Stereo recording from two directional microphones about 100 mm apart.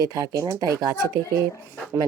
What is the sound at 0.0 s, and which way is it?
Speech, 35° right (ahead or behind).